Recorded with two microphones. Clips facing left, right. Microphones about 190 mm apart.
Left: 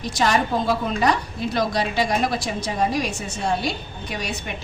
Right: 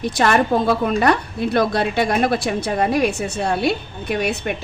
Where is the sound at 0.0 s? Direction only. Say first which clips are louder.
Right 4 dB; 60° right (ahead or behind).